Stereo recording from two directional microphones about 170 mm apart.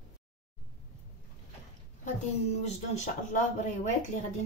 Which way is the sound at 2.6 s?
45° left (ahead or behind).